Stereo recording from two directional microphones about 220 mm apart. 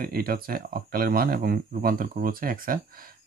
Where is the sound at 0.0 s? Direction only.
45° right (ahead or behind).